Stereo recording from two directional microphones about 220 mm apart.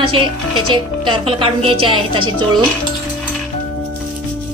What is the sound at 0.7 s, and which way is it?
Speech, 20° right (ahead or behind).